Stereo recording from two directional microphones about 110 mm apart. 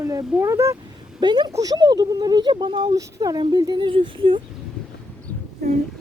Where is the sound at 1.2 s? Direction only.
40° right (ahead or behind).